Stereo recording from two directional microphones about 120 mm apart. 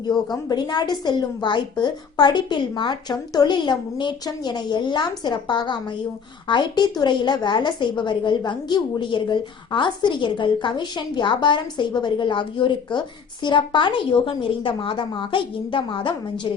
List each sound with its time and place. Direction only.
0.4 s a woman's voice: 35° left (ahead or behind)